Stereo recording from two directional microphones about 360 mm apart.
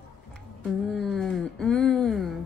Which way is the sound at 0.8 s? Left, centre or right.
Centre.